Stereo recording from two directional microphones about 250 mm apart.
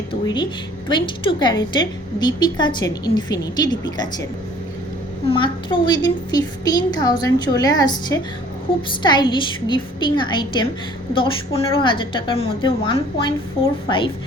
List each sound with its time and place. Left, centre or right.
0.1 s a woman's voice: centre
5.3 s a woman's voice: centre